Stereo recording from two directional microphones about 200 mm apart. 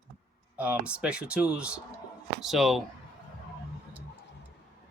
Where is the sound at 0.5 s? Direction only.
5° right (ahead or behind).